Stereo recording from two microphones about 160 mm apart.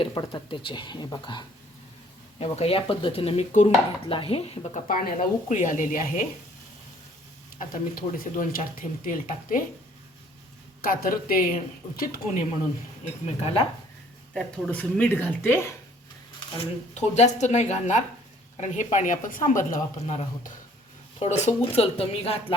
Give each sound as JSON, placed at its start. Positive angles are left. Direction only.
{"t": 0.0, "sound": "speech", "side_deg": 25}
{"t": 2.4, "sound": "speech", "side_deg": 40}
{"t": 4.9, "sound": "speech", "side_deg": 50}
{"t": 7.6, "sound": "speech", "side_deg": 60}
{"t": 10.8, "sound": "speech", "side_deg": 65}
{"t": 13.2, "sound": "speech", "side_deg": 35}
{"t": 14.3, "sound": "speech", "side_deg": 10}
{"t": 16.9, "sound": "speech", "side_deg": 45}